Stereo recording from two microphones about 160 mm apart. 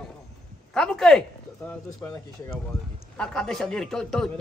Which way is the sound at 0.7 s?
5° left (ahead or behind).